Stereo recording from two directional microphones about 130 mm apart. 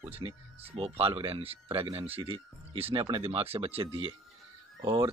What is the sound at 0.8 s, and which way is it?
Speech, 45° right (ahead or behind).